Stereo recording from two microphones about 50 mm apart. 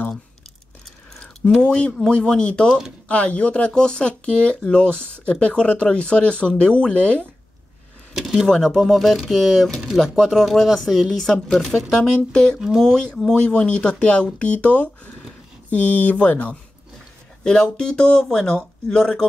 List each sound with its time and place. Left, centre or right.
0.8 s a sound: centre
2.0 s speech: centre
8.1 s speech: centre
8.5 s speech: centre
12.0 s speech: centre
12.5 s speech: centre
12.8 s speech: centre; by 16.5 s left
17.4 s speech: centre